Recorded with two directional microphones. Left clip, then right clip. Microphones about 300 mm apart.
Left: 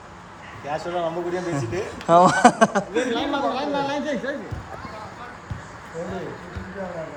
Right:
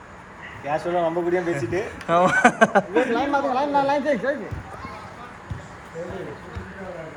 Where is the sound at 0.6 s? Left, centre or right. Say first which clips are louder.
Right 3 dB; right.